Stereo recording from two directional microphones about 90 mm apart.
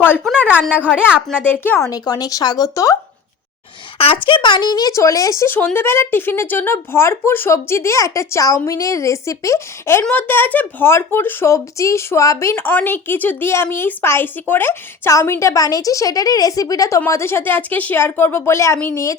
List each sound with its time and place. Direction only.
1.1 s a woman's voice: 15° right (ahead or behind)
1.5 s a woman's voice: 20° left (ahead or behind)
1.9 s speech: 45° left (ahead or behind)
3.9 s a woman's voice: 90° left; by 10.0 s 30° left (ahead or behind)
10.0 s a woman's voice: 20° left (ahead or behind)
11.4 s a woman's voice: 35° left (ahead or behind)
17.1 s a woman's voice: 30° left (ahead or behind)